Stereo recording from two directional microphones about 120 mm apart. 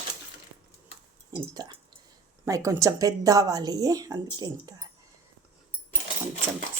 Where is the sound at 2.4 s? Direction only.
25° right (ahead or behind).